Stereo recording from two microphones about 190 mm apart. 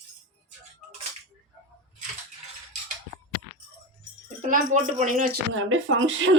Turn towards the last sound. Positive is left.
turn(degrees=-90)